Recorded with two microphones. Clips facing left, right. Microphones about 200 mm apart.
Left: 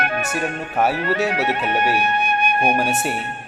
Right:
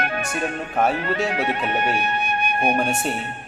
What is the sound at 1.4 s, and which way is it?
Speech, 70° left (ahead or behind).